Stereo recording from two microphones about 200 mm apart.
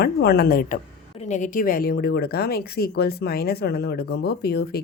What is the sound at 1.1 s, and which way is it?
A woman's voice, 35° left (ahead or behind).